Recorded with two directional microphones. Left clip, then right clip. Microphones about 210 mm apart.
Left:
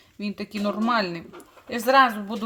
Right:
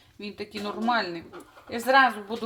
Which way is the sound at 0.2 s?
35° left (ahead or behind).